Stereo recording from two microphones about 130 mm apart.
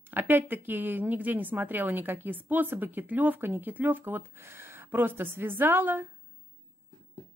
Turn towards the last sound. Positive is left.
turn(degrees=-15)  # may be behind; listen again after turning